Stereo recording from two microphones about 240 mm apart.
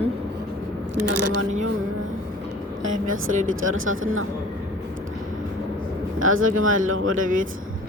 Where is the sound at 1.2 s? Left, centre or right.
Right.